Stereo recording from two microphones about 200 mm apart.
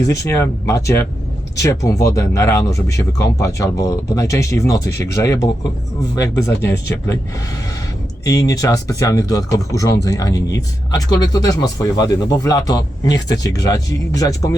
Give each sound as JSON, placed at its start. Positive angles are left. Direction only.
{"t": 0.0, "sound": "speech", "side_deg": 15}
{"t": 8.2, "sound": "speech", "side_deg": 20}